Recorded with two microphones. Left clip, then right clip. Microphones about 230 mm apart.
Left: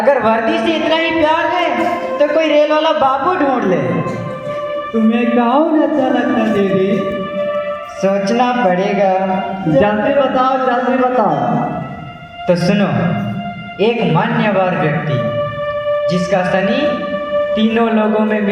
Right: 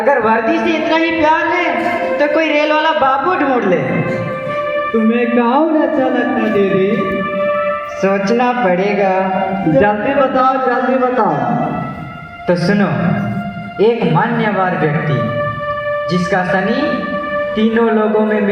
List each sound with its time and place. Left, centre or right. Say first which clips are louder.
0.1 s a sound: right 1 dB; left
4.9 s speech: left 1 dB; left
8.0 s speech: even; left
12.5 s a man's voice: even; left
16.1 s a man's voice: even; left